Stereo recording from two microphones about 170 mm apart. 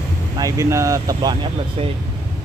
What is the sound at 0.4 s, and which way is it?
Speech, 20° right (ahead or behind).